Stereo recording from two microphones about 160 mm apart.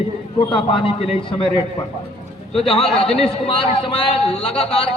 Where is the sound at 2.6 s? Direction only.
35° left (ahead or behind).